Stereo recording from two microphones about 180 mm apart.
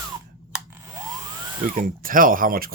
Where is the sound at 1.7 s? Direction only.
50° right (ahead or behind).